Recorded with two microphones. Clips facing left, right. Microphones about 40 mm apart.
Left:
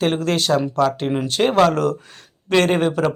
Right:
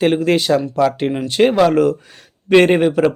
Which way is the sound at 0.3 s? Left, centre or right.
Centre.